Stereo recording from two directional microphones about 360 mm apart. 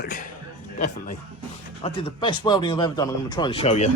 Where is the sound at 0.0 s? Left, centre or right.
Left.